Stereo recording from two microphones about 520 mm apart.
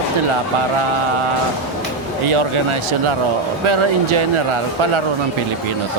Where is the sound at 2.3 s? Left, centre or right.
Right.